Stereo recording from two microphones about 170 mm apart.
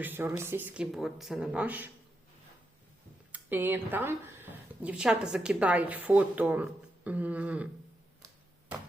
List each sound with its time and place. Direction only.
0.0 s a woman's voice: 10° right (ahead or behind)
3.3 s a woman's voice: 10° right (ahead or behind)